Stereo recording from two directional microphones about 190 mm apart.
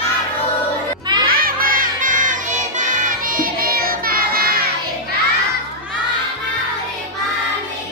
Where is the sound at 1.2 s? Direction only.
50° right (ahead or behind).